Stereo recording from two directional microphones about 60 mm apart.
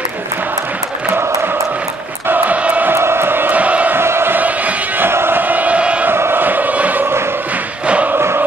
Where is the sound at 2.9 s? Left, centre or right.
Right.